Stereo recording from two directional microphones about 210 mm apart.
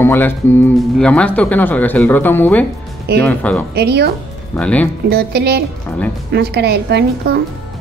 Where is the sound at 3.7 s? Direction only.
50° right (ahead or behind).